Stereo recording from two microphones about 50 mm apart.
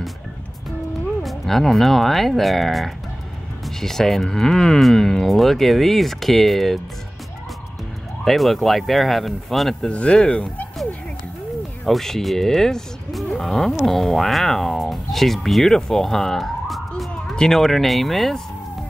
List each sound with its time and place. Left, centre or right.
1.2 s speech: centre
8.2 s speech: centre
9.8 s speech: left
11.8 s speech: centre